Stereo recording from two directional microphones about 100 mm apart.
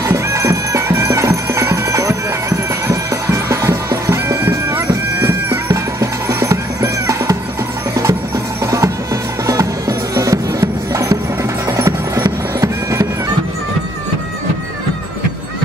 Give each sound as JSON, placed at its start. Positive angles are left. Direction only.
{"t": 0.1, "sound": "music", "side_deg": -30}